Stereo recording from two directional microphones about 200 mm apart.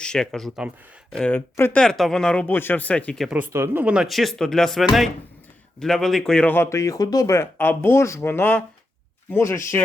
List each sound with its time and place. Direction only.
0.0 s speech: 5° left (ahead or behind)
3.2 s speech: 10° right (ahead or behind); by 9.6 s 15° left (ahead or behind)